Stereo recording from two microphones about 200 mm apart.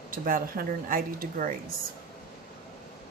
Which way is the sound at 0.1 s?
45° right (ahead or behind).